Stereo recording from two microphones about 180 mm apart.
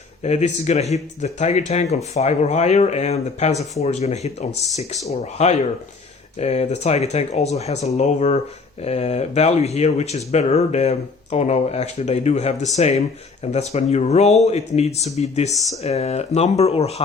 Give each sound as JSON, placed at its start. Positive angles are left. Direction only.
{"t": 0.2, "sound": "speech", "side_deg": 40}